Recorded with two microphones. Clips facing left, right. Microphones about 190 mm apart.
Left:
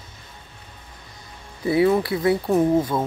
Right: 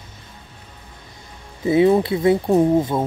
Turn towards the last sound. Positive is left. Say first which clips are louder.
# right 2 dB
turn(degrees=-25)  # may be behind; listen again after turning